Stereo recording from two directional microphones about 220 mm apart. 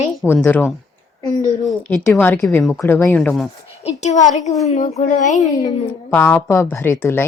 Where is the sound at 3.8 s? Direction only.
30° left (ahead or behind).